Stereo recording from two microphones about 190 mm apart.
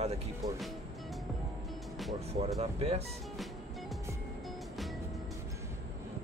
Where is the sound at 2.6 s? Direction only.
35° right (ahead or behind).